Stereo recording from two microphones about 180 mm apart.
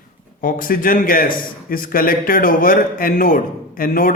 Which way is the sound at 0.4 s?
50° left (ahead or behind).